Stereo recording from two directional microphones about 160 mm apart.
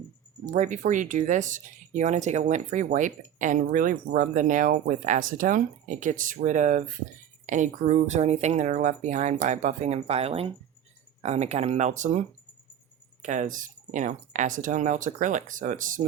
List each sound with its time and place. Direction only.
0.4 s speech: 50° right (ahead or behind)
13.2 s speech: 50° right (ahead or behind)